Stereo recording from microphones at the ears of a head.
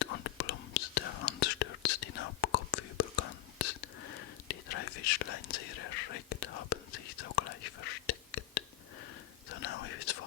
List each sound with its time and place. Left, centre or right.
0.0 s whispering: left